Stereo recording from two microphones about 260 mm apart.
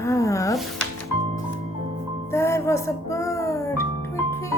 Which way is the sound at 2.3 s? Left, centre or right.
Centre.